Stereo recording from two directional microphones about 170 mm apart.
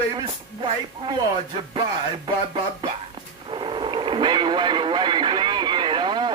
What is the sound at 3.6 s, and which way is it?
Radio, 30° right (ahead or behind).